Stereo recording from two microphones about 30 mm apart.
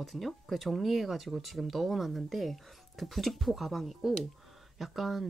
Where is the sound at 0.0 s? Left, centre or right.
Centre.